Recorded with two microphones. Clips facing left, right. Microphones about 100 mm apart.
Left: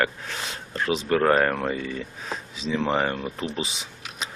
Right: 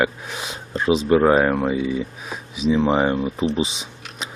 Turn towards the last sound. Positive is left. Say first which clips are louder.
# right 8 dB
turn(degrees=-20)  # may be behind; listen again after turning